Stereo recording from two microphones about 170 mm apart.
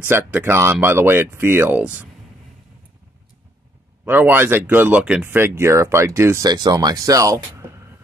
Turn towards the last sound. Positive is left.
turn(degrees=-20)  # may be behind; listen again after turning